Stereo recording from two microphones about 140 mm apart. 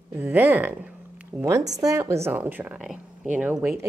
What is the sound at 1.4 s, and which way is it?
A woman's voice, 25° right (ahead or behind).